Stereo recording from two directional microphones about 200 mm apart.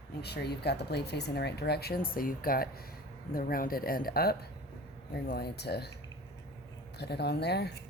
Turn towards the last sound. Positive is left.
turn(degrees=55)  # may be behind; listen again after turning